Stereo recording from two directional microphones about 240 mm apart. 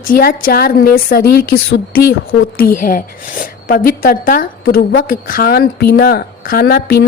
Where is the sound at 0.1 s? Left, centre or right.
Left.